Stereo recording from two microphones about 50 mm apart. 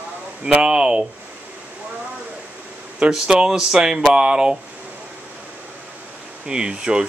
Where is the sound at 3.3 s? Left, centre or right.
Centre.